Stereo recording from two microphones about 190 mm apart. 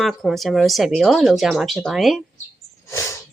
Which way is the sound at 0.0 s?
Centre (ahead or behind).